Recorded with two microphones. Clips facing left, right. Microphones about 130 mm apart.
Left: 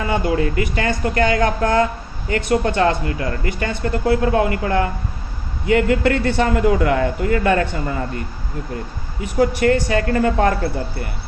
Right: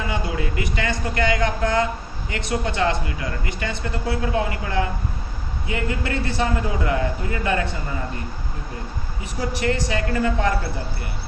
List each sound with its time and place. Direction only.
0.1 s speech: 50° left (ahead or behind)
5.6 s a man's voice: 65° left (ahead or behind)
9.4 s speech: 50° left (ahead or behind)